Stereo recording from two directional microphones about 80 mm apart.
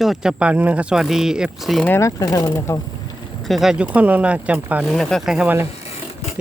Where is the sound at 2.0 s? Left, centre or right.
Left.